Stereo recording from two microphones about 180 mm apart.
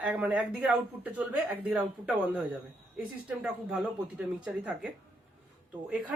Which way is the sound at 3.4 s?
5° right (ahead or behind).